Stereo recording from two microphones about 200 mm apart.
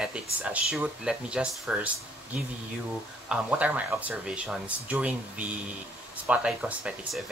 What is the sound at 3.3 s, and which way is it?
Speech, 5° right (ahead or behind).